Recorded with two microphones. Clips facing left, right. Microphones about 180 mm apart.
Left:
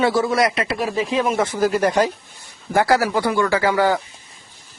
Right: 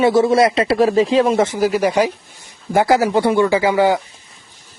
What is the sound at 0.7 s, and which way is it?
Speech, 40° right (ahead or behind).